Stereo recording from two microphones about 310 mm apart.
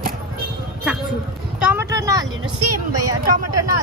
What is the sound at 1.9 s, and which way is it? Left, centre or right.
Speech, centre.